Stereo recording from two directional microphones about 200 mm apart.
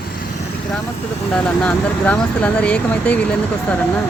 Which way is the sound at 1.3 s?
5° left (ahead or behind).